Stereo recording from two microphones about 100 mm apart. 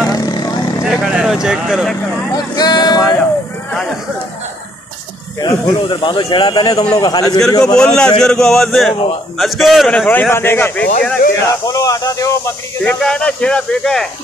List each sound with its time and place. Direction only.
0.0 s vehicle: 40° left (ahead or behind)
0.8 s speech: 10° right (ahead or behind)
2.3 s speech: 45° left (ahead or behind)
3.7 s speech: 5° left (ahead or behind)
5.4 s speech: 45° left (ahead or behind)
7.6 s speech: 10° left (ahead or behind)
10.0 s speech: 15° left (ahead or behind)
11.4 s speech: 40° left (ahead or behind)
12.8 s speech: 10° left (ahead or behind)